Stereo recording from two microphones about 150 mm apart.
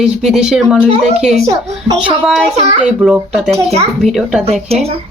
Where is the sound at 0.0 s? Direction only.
5° right (ahead or behind).